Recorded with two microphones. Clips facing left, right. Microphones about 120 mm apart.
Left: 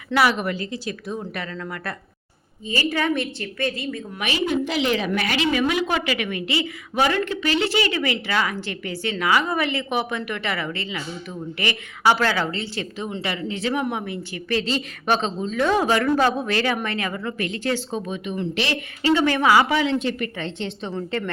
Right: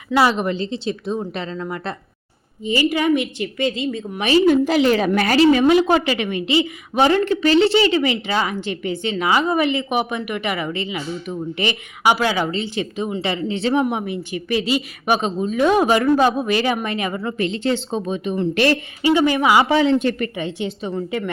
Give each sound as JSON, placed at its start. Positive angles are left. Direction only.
{"t": 0.1, "sound": "a woman's voice", "side_deg": -25}
{"t": 4.2, "sound": "a woman's voice", "side_deg": -35}
{"t": 18.5, "sound": "speech", "side_deg": -50}
{"t": 19.0, "sound": "speech", "side_deg": -15}
{"t": 19.7, "sound": "a woman's voice", "side_deg": -35}
{"t": 20.0, "sound": "speech", "side_deg": -50}
{"t": 20.3, "sound": "speech", "side_deg": -10}